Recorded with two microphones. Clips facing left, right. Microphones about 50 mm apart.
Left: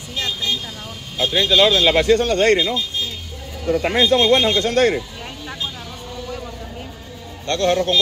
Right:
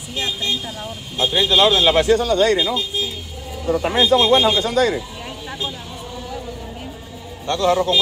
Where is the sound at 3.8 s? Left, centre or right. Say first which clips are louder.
Right 1 dB; left.